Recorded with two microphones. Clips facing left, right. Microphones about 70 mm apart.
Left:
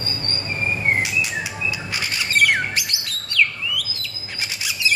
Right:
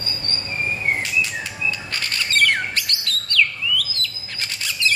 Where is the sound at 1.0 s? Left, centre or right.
Centre.